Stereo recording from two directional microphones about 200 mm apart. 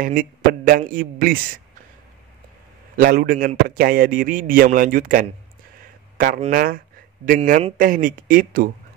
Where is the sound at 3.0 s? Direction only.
45° right (ahead or behind).